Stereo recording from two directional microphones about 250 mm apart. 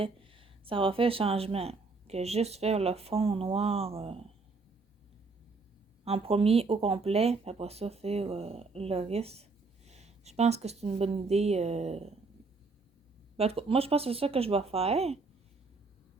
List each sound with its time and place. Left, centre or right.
0.0 s speech: right
6.1 s speech: right
13.3 s speech: right